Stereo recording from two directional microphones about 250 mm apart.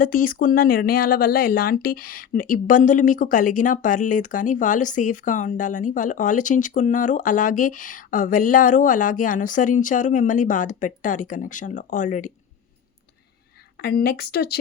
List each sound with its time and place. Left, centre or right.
0.0 s speech: left
13.7 s speech: left